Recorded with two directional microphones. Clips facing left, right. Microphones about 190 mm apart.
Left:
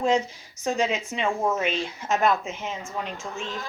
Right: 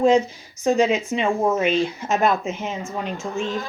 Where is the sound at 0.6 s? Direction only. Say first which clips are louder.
Right 7 dB; 10° right (ahead or behind).